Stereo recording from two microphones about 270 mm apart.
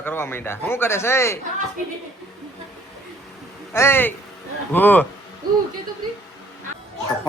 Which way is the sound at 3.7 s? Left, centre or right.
Centre.